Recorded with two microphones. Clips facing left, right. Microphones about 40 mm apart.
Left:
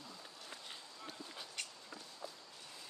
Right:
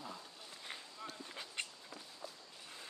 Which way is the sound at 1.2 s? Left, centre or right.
Right.